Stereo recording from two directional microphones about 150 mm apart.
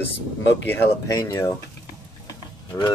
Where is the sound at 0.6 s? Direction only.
20° left (ahead or behind).